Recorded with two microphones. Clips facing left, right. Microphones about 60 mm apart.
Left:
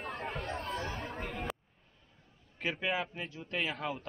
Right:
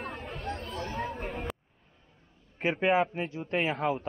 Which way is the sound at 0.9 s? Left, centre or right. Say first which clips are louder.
Right 5 dB; centre.